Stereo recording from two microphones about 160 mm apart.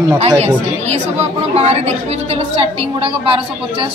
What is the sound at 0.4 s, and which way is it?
A woman's voice, 45° right (ahead or behind).